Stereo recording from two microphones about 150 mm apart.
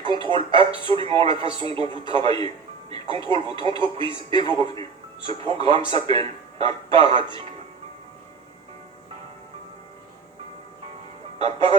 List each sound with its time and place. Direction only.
0.0 s a man's voice: 35° right (ahead or behind)
11.3 s music: 35° right (ahead or behind)